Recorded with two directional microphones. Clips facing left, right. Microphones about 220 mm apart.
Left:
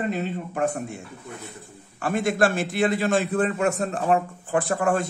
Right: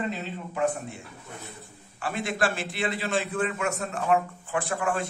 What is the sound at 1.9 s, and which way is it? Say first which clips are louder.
A man's voice: left 6 dB; 45° left (ahead or behind).